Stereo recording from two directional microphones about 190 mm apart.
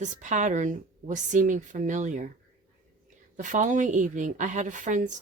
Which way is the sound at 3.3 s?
40° right (ahead or behind).